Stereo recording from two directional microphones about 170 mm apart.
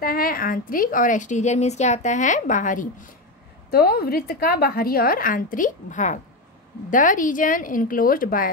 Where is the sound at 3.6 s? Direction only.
65° left (ahead or behind).